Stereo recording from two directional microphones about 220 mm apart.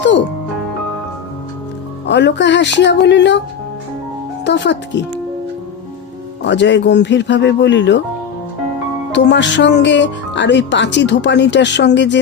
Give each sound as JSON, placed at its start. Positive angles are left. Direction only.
{"t": 2.0, "sound": "speech", "side_deg": 55}
{"t": 4.4, "sound": "speech", "side_deg": 50}
{"t": 6.4, "sound": "speech", "side_deg": 55}
{"t": 9.1, "sound": "speech", "side_deg": 55}